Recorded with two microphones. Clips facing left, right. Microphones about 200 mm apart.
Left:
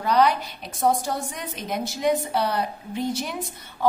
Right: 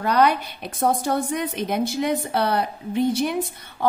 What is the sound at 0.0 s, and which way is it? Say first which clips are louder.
A woman's voice: right 1 dB; 60° right (ahead or behind).